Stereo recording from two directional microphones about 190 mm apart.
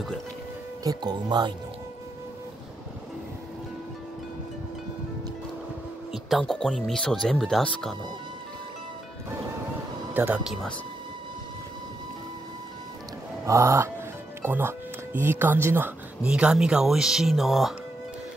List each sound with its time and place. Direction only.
0.8 s speech: 20° right (ahead or behind)
6.1 s speech: centre (ahead or behind)
10.1 s speech: 10° right (ahead or behind)
13.5 s a sound: 15° right (ahead or behind)
14.4 s speech: 10° right (ahead or behind)